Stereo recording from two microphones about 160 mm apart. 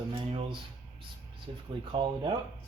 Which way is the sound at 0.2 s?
30° right (ahead or behind).